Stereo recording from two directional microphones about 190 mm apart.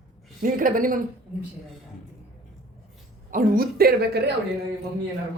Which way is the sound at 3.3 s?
50° right (ahead or behind).